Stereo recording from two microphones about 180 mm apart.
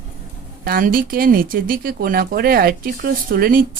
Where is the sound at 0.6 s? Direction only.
55° right (ahead or behind).